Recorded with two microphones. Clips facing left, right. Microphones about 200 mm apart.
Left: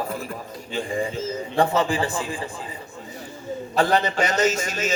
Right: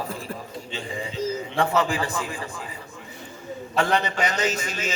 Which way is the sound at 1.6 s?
35° left (ahead or behind).